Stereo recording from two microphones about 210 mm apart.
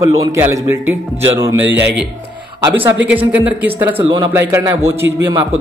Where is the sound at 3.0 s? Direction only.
5° right (ahead or behind).